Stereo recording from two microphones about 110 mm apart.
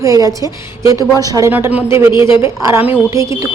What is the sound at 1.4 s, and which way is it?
Speech, 20° right (ahead or behind).